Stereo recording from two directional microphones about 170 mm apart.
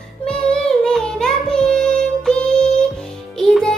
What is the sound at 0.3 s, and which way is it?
Child singing, 5° left (ahead or behind).